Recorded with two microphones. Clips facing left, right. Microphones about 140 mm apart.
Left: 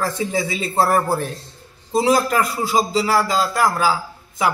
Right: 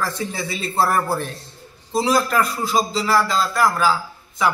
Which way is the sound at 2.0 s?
15° left (ahead or behind).